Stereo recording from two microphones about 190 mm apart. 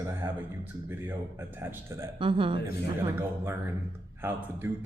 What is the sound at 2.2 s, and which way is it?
Laughter, 25° right (ahead or behind).